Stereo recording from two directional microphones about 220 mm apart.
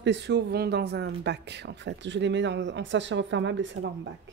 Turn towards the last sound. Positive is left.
turn(degrees=-55)  # may be behind; listen again after turning